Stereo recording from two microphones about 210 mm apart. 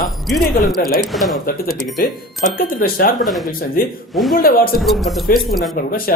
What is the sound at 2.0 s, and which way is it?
Speech, 45° left (ahead or behind).